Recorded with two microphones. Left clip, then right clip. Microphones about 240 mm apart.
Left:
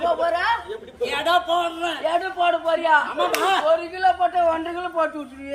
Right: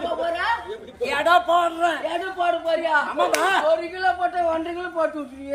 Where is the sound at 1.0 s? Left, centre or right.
Centre.